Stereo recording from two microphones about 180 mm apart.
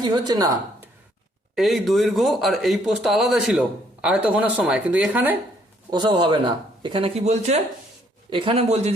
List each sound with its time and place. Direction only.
0.0 s a woman's voice: 20° right (ahead or behind)
1.5 s a man's voice: centre (ahead or behind)
5.9 s a woman's voice: 25° right (ahead or behind)